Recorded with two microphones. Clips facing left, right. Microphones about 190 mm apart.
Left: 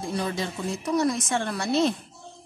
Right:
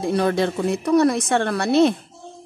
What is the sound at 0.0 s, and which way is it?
Speech, 65° right (ahead or behind).